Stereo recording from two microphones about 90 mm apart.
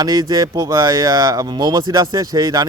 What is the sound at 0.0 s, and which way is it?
A man's voice, 45° right (ahead or behind).